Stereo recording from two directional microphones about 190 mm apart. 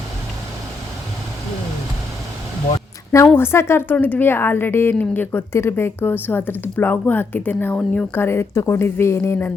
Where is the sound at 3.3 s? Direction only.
10° left (ahead or behind).